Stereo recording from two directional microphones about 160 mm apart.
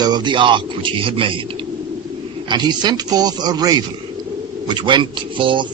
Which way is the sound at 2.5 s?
30° right (ahead or behind).